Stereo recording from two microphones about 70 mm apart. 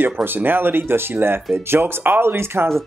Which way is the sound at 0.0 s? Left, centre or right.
Right.